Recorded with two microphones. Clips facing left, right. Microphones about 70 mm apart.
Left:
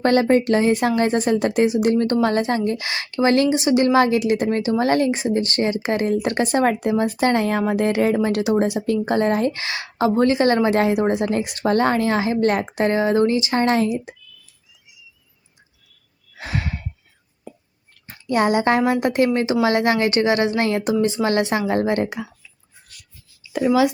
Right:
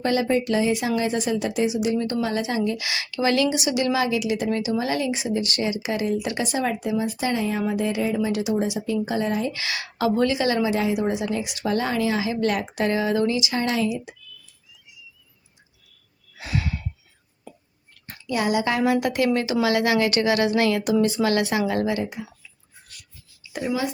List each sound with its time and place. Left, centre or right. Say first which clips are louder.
0.0 s a woman's voice: left 6 dB; left
2.6 s a woman's voice: left 3 dB; left
16.4 s a sound: left 1 dB; left
18.3 s a woman's voice: left 5 dB; left
22.2 s speech: left 5 dB; left